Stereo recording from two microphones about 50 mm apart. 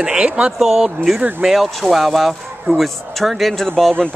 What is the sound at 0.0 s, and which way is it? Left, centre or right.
Speech, centre.